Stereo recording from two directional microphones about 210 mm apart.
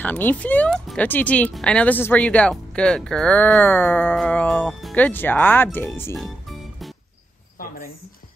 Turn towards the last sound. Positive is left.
turn(degrees=0)  # may be behind; listen again after turning